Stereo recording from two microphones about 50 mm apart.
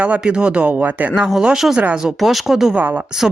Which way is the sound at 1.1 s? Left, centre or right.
Centre.